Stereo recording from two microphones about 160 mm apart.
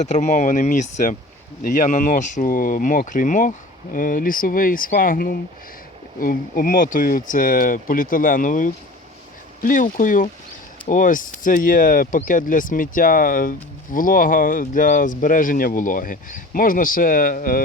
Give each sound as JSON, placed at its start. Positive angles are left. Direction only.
{"t": 0.0, "sound": "speech", "side_deg": 45}